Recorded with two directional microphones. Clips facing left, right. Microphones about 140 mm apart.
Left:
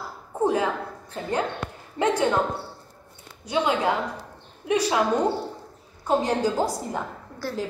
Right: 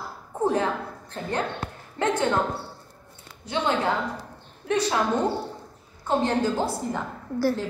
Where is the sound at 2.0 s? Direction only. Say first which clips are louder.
Left 2 dB; 10° left (ahead or behind).